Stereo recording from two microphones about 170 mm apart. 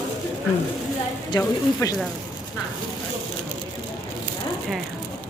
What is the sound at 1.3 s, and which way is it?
Speech, 20° left (ahead or behind).